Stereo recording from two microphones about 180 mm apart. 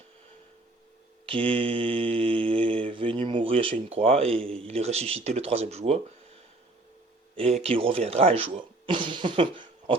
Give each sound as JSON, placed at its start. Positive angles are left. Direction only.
{"t": 1.3, "sound": "mantra", "side_deg": -30}
{"t": 4.6, "sound": "speech", "side_deg": -35}
{"t": 7.3, "sound": "speech", "side_deg": -35}